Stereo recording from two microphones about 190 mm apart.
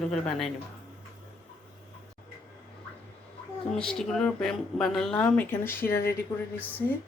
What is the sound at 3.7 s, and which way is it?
Speech, 5° left (ahead or behind).